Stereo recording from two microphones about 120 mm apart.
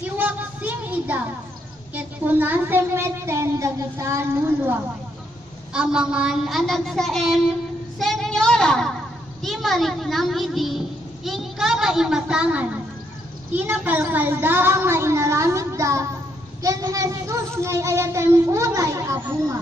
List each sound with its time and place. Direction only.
0.0 s music: 15° right (ahead or behind)
2.0 s speech: 15° right (ahead or behind)
5.7 s a woman's voice: 5° right (ahead or behind)
8.0 s a sound: 5° left (ahead or behind)
9.4 s a woman's voice: centre (ahead or behind); by 19.6 s 25° right (ahead or behind)